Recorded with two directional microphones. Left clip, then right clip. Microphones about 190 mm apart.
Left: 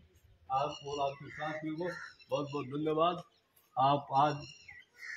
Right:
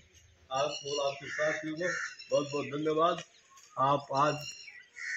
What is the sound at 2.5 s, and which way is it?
A man's voice, 30° left (ahead or behind).